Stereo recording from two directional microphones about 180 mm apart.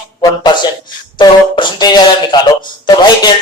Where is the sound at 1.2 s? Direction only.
25° left (ahead or behind).